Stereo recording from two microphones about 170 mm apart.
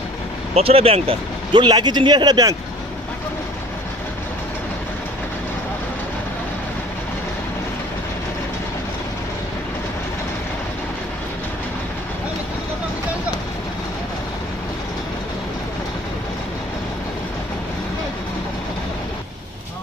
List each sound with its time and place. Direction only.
0.6 s speech: 35° right (ahead or behind)